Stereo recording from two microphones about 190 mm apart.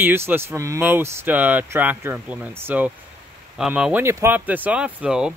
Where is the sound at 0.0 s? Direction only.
10° right (ahead or behind).